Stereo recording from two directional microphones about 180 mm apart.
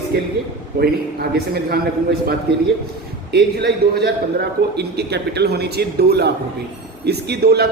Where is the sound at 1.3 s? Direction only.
60° right (ahead or behind).